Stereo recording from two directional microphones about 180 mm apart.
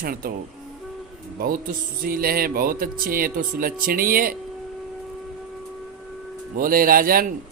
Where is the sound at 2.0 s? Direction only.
55° right (ahead or behind).